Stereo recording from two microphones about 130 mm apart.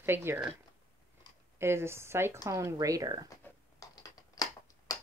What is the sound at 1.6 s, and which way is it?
Speech, 20° right (ahead or behind).